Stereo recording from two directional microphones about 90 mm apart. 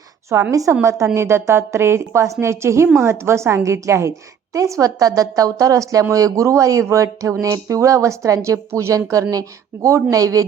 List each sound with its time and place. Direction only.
0.3 s a woman's voice: 30° right (ahead or behind)